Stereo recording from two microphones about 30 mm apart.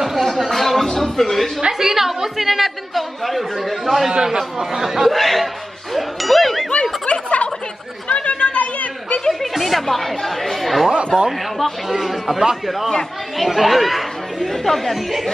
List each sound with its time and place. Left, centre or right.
0.0 s a sound: centre
0.5 s music: centre
0.9 s a sound: centre
1.7 s a woman's voice: centre
4.1 s a woman's voice: right
5.1 s speech: centre
5.9 s ding: centre
6.7 s snicker: left
8.1 s chatter: left
8.5 s chatter: left
9.4 s speech: centre
13.5 s speech: centre